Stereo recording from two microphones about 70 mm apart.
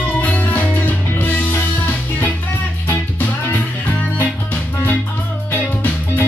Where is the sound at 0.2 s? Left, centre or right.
Left.